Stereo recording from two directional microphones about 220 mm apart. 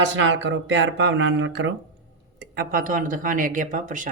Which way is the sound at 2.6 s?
40° right (ahead or behind).